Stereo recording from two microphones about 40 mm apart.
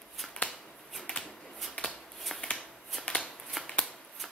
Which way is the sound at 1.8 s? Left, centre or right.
Left.